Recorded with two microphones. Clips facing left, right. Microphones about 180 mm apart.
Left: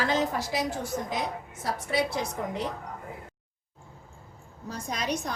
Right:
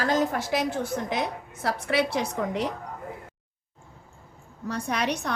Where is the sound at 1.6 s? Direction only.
70° right (ahead or behind).